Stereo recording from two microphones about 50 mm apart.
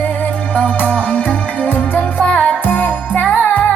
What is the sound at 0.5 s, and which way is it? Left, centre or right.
Music, left.